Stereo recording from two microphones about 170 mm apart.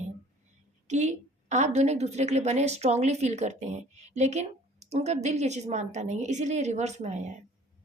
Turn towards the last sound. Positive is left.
turn(degrees=-45)  # may be behind; listen again after turning